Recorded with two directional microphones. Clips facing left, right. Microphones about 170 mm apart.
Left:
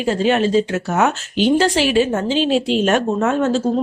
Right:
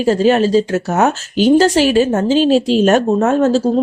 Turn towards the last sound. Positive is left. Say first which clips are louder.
# right 4 dB
turn(degrees=-40)  # may be behind; listen again after turning